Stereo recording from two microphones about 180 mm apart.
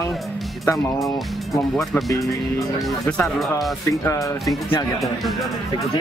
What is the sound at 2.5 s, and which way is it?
Speech, centre (ahead or behind).